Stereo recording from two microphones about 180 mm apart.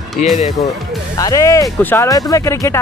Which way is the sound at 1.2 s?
20° left (ahead or behind).